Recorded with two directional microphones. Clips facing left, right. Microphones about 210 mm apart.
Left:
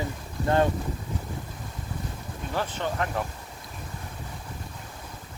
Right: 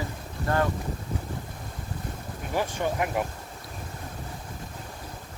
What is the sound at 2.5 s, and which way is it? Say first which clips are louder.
Speech: right 2 dB; 10° right (ahead or behind).